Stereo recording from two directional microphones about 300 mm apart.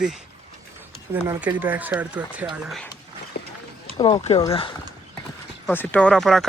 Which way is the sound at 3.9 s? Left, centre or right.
Centre.